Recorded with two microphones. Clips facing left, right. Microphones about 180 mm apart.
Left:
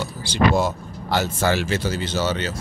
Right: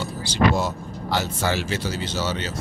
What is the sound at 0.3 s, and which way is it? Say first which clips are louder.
Speech: left 2 dB; 55° left (ahead or behind).